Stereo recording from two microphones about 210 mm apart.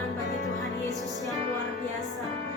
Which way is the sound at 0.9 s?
15° left (ahead or behind).